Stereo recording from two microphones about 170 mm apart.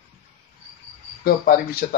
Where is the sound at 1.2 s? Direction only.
60° left (ahead or behind).